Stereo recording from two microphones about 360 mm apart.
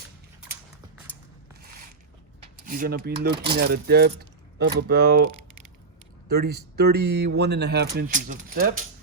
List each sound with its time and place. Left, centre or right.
2.6 s speech: right
6.2 s speech: right